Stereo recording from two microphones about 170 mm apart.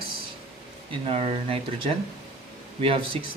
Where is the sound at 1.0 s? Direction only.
35° right (ahead or behind).